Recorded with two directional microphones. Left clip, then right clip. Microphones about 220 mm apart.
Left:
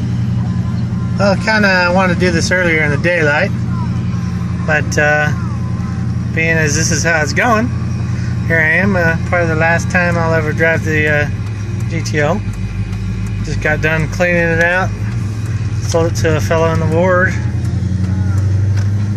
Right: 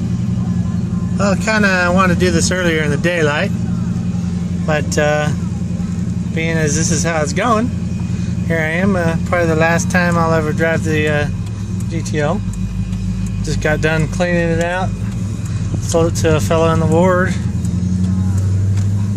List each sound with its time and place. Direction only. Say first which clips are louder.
1.1 s speech: left 3 dB; 5° right (ahead or behind)
4.6 s speech: left 3 dB; 10° right (ahead or behind)
6.3 s speech: left 5 dB; 5° right (ahead or behind)
9.3 s speech: right 2 dB; 20° right (ahead or behind); by 12.4 s 5° right (ahead or behind)
13.6 s speech: left 2 dB; 15° right (ahead or behind)
15.9 s speech: even; 15° right (ahead or behind)